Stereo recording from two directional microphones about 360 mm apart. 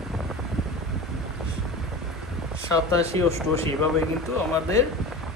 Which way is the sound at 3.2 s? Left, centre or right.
Centre.